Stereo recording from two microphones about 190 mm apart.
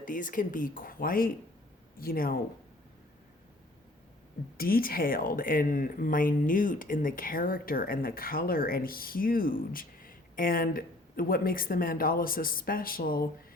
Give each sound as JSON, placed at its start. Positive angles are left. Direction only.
{"t": 0.0, "sound": "speech", "side_deg": 45}
{"t": 4.5, "sound": "speech", "side_deg": 50}